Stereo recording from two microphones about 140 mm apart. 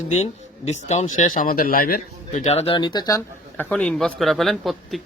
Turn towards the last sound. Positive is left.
turn(degrees=0)  # may be behind; listen again after turning